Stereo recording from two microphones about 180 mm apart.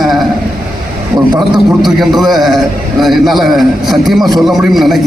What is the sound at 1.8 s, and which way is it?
A man's voice, centre (ahead or behind).